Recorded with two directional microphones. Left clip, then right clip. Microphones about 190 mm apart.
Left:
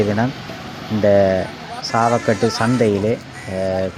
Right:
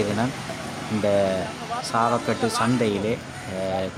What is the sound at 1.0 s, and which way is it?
Speech, 25° left (ahead or behind).